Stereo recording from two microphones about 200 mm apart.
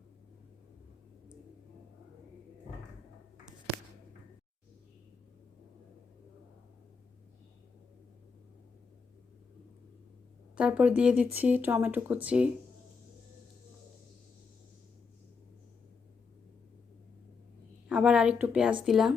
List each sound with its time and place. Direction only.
10.5 s speech: 5° right (ahead or behind)
17.8 s a woman's voice: 5° right (ahead or behind)